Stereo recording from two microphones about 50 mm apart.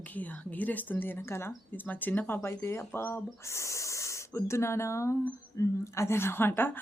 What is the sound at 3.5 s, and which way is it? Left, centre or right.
A woman's voice, left.